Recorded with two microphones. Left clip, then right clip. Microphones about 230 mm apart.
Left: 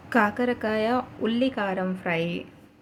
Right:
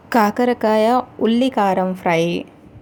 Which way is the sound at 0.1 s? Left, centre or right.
Right.